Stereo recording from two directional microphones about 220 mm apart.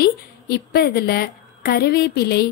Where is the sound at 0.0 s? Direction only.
45° left (ahead or behind).